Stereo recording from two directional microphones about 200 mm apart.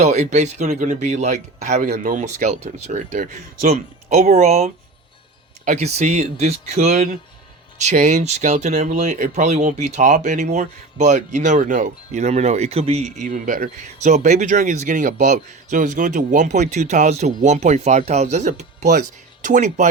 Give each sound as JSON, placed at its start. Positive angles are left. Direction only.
{"t": 0.0, "sound": "speech", "side_deg": -35}